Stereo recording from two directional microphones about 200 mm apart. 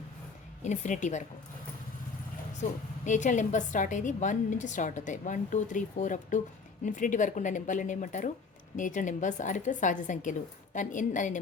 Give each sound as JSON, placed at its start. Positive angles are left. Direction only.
{"t": 0.6, "sound": "a woman's voice", "side_deg": 35}
{"t": 3.1, "sound": "a woman's voice", "side_deg": 40}